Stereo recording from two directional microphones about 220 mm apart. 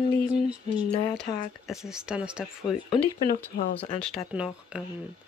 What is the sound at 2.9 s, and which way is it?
Speech, 30° left (ahead or behind).